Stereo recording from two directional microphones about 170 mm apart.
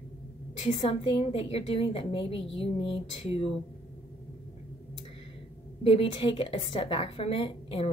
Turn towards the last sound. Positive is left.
turn(degrees=30)  # may be behind; listen again after turning